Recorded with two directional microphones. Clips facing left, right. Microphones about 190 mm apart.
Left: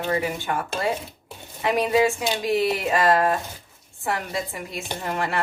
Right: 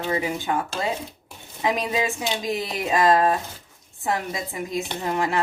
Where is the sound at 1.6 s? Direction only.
20° right (ahead or behind).